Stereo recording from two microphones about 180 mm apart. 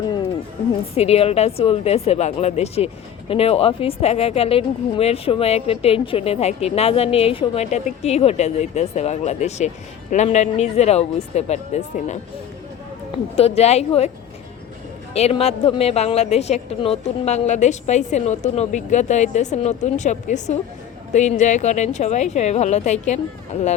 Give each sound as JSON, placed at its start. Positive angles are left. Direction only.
{"t": 0.9, "sound": "a woman's voice", "side_deg": 35}
{"t": 13.3, "sound": "a woman's voice", "side_deg": 35}
{"t": 15.1, "sound": "a woman's voice", "side_deg": 35}